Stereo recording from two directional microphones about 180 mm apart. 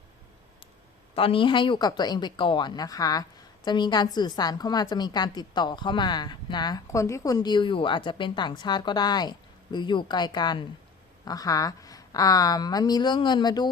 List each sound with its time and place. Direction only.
1.1 s speech: 30° left (ahead or behind)